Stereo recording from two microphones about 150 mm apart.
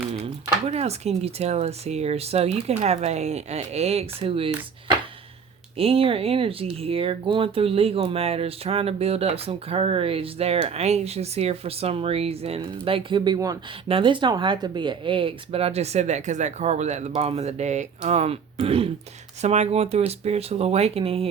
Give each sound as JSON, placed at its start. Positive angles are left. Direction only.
{"t": 0.7, "sound": "speech", "side_deg": -45}
{"t": 5.7, "sound": "speech", "side_deg": -40}